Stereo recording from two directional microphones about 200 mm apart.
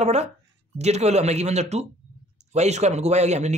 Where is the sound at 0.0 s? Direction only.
35° right (ahead or behind).